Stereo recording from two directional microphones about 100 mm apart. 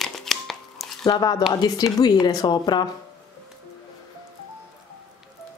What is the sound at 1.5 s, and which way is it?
Speech, 45° left (ahead or behind).